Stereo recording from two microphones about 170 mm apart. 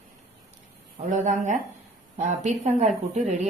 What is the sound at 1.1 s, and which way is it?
A woman's voice, 45° right (ahead or behind).